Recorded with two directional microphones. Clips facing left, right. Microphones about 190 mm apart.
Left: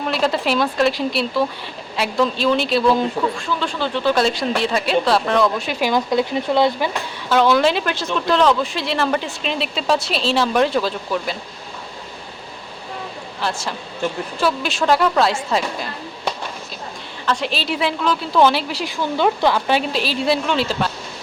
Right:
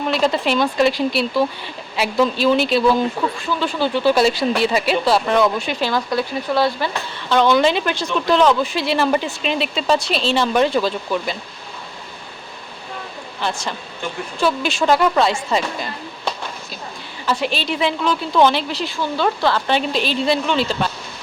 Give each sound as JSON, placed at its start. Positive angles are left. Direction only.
{"t": 0.0, "sound": "speech", "side_deg": 0}
{"t": 5.8, "sound": "speech", "side_deg": 20}
{"t": 7.3, "sound": "speech", "side_deg": 5}
{"t": 13.4, "sound": "speech", "side_deg": 5}
{"t": 17.2, "sound": "speech", "side_deg": -5}